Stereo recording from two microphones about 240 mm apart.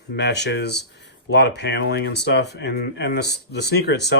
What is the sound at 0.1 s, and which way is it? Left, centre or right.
Speech, left.